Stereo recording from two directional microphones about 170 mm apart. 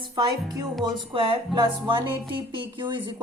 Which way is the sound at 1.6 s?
30° right (ahead or behind).